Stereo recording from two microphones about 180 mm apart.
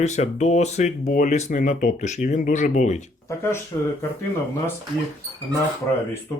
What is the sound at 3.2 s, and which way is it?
Speech, 15° left (ahead or behind).